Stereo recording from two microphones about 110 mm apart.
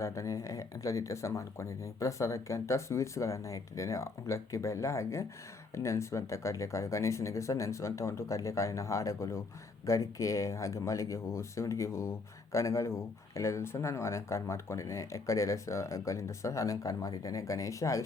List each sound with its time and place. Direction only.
0.0 s speech: 25° left (ahead or behind)